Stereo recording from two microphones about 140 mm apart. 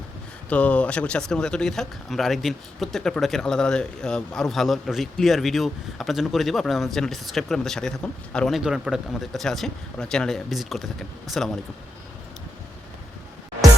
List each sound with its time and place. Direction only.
0.5 s speech: 10° left (ahead or behind)